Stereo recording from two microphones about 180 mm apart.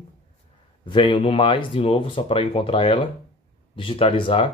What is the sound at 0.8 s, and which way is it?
Speech, 25° left (ahead or behind).